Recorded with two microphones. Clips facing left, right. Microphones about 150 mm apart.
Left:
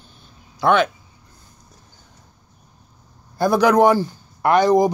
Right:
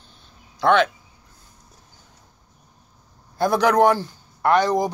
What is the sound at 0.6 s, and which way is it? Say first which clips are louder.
Speech: left 1 dB; 5° left (ahead or behind).